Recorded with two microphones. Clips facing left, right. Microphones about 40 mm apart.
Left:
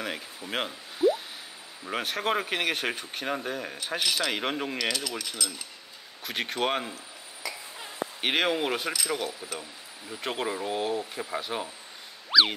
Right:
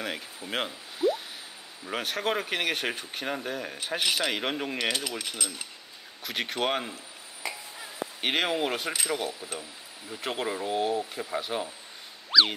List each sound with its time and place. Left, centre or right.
0.0 s speech: centre
3.8 s a man's voice: centre
4.3 s speech: centre
4.7 s mechanisms: right
5.4 s cutlery: right
6.2 s speech: centre
7.4 s a sound: right
8.2 s speech: centre
12.3 s boing: centre